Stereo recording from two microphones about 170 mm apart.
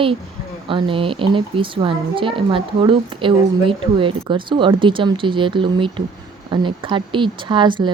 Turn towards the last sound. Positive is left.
turn(degrees=-30)  # may be behind; listen again after turning